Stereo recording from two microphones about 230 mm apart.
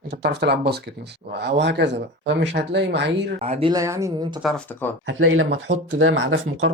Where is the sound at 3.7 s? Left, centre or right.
Centre.